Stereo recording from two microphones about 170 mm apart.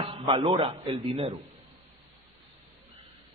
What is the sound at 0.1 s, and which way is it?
A man's voice, 30° right (ahead or behind).